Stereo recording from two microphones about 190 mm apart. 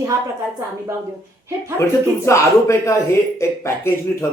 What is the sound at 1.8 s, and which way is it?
Speech, 15° left (ahead or behind).